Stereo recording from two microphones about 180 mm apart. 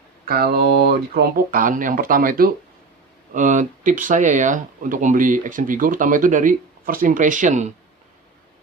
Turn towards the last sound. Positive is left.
turn(degrees=-40)  # may be behind; listen again after turning